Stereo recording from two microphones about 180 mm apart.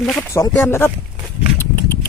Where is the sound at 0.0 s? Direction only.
5° left (ahead or behind).